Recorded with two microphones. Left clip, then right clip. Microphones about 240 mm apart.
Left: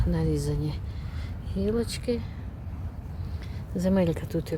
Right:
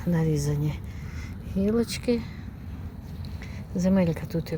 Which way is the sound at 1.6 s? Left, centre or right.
Centre.